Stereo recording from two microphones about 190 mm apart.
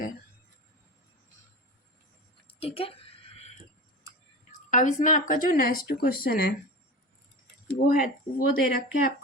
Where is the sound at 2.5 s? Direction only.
30° left (ahead or behind).